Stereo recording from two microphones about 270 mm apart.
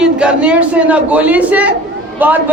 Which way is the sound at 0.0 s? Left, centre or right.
Centre.